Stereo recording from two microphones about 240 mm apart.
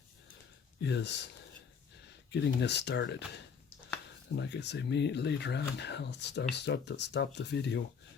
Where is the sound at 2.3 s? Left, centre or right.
Left.